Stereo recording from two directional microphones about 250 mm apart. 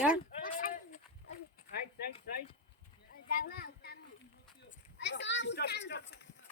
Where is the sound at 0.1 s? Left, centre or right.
Left.